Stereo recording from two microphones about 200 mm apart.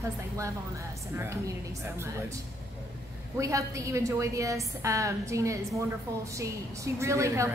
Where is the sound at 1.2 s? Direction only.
15° right (ahead or behind).